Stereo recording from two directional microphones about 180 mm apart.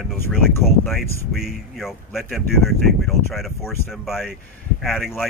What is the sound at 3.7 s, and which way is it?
Speech, 15° left (ahead or behind).